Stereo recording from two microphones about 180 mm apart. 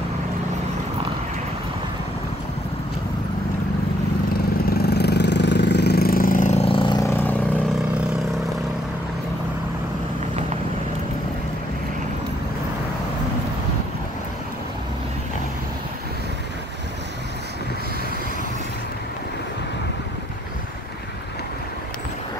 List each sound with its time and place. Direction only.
4.6 s vehicle: 60° left (ahead or behind); by 7.3 s 15° left (ahead or behind)